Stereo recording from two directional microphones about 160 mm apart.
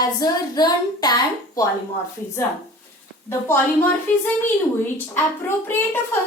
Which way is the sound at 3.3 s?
15° left (ahead or behind).